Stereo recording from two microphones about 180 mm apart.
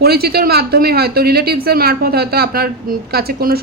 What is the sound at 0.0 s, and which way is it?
Speech, 60° right (ahead or behind).